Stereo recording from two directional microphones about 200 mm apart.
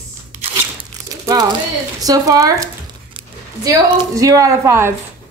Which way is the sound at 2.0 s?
20° right (ahead or behind).